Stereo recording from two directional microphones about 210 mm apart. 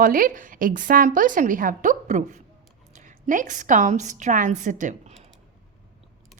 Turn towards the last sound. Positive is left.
turn(degrees=-35)  # may be behind; listen again after turning